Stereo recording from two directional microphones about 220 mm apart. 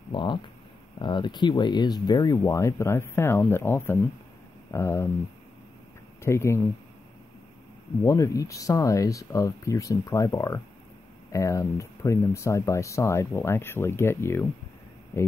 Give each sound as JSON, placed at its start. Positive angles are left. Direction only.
{"t": 0.1, "sound": "a sound", "side_deg": 20}
{"t": 1.0, "sound": "speech", "side_deg": 20}
{"t": 6.2, "sound": "speech", "side_deg": 10}
{"t": 8.0, "sound": "speech", "side_deg": 15}